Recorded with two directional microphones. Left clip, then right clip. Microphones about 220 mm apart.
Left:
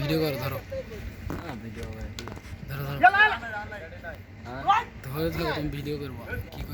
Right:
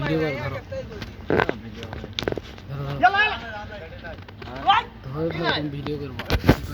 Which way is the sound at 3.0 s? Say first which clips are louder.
Even; 40° right (ahead or behind).